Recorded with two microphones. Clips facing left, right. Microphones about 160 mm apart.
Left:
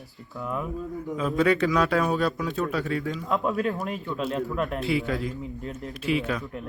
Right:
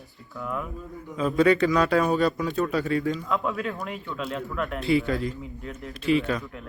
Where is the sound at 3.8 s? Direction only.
30° left (ahead or behind).